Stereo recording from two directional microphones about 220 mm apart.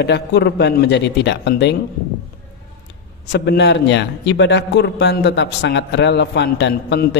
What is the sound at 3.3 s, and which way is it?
A man's voice, 50° left (ahead or behind).